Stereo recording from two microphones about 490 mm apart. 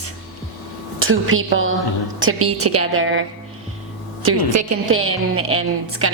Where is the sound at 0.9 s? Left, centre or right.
Right.